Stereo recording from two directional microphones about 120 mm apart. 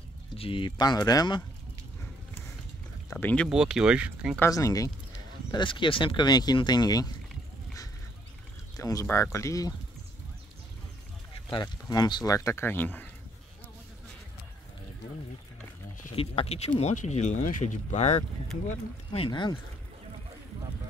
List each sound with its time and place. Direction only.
0.4 s speech: 45° left (ahead or behind)
3.1 s speech: 15° left (ahead or behind)
3.4 s speech: 5° right (ahead or behind)
4.5 s speech: 30° left (ahead or behind)
5.5 s speech: 40° left (ahead or behind)
8.7 s a sound: 30° left (ahead or behind)
9.0 s speech: 20° left (ahead or behind)
11.5 s speech: 35° left (ahead or behind); by 13.1 s 15° left (ahead or behind)
16.2 s speech: 55° left (ahead or behind)
19.1 s speech: 45° left (ahead or behind)